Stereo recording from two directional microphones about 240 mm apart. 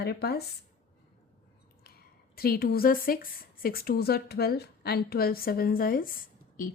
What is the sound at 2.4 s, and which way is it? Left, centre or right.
A woman's voice, left.